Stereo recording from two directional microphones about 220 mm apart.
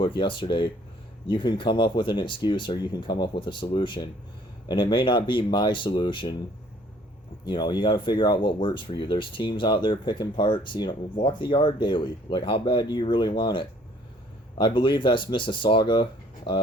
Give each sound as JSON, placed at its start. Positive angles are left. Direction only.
{"t": 0.0, "sound": "speech", "side_deg": 20}
{"t": 7.4, "sound": "speech", "side_deg": 20}